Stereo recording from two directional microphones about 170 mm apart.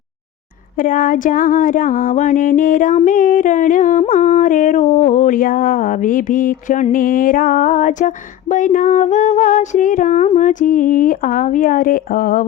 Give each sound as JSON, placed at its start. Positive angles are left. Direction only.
{"t": 0.8, "sound": "mantra", "side_deg": 55}